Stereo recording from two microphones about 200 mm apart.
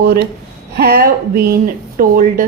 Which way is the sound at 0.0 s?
50° right (ahead or behind).